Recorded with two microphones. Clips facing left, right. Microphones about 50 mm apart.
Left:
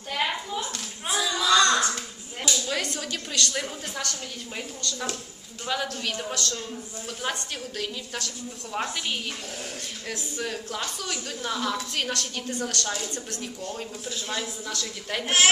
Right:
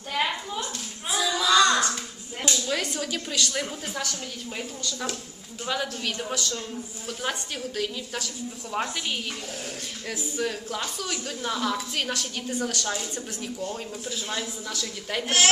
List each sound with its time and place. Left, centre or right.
0.1 s a sound: centre
2.6 s a woman's voice: centre
7.8 s a woman's voice: centre
15.2 s a woman's voice: centre